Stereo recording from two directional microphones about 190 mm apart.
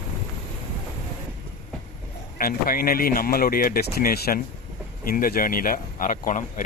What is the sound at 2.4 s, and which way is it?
Speech, 50° left (ahead or behind).